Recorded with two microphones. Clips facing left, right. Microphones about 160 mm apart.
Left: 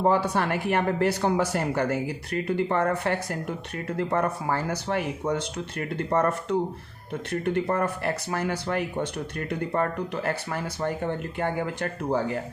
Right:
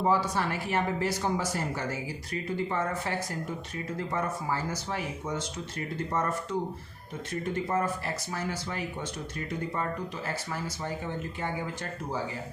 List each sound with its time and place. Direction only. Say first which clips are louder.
0.0 s speech: left 4 dB; 60° left (ahead or behind)